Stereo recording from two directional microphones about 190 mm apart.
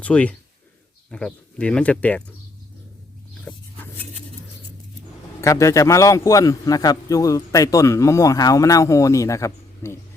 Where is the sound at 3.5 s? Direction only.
10° left (ahead or behind).